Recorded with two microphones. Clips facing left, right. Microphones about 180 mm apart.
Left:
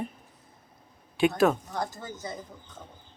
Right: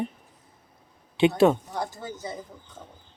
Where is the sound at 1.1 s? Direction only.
25° right (ahead or behind).